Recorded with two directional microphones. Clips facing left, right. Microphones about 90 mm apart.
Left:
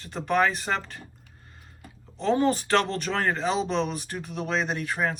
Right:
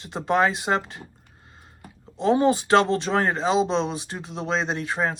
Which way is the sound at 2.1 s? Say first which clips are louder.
Right 4 dB; 20° right (ahead or behind).